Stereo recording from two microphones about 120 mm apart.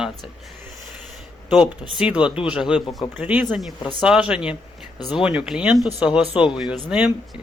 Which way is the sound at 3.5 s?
Centre (ahead or behind).